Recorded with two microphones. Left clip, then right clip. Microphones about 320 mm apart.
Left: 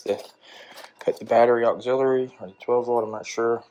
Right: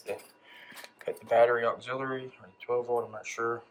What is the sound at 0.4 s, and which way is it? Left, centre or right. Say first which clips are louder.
Speech: left 5 dB; centre.